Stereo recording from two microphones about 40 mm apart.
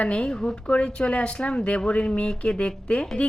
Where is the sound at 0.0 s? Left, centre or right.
Left.